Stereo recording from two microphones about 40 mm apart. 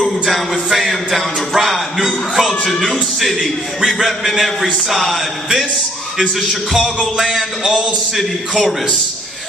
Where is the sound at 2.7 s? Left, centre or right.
Centre.